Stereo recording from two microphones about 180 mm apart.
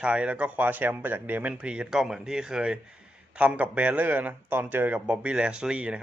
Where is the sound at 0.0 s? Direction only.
5° right (ahead or behind).